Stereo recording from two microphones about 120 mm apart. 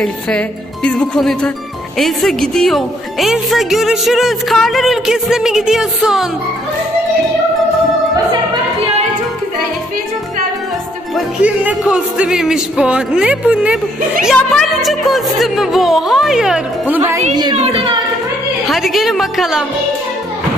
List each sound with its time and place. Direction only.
0.8 s speech: 10° left (ahead or behind); by 6.2 s 5° right (ahead or behind)
11.4 s speech: 10° right (ahead or behind)
14.3 s speech: 5° left (ahead or behind)
16.8 s speech: 15° right (ahead or behind)
17.6 s speech: 55° right (ahead or behind)
18.7 s speech: centre (ahead or behind)